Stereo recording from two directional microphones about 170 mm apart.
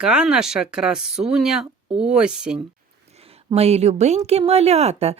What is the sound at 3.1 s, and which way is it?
A woman's voice, 35° right (ahead or behind).